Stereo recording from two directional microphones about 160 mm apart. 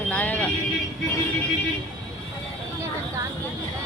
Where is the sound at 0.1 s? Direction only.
10° left (ahead or behind).